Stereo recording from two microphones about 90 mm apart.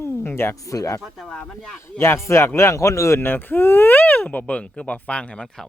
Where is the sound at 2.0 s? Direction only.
30° left (ahead or behind).